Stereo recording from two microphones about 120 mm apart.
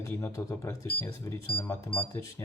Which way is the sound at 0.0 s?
25° left (ahead or behind).